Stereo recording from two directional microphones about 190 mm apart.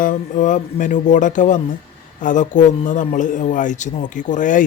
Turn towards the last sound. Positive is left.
turn(degrees=45)  # may be behind; listen again after turning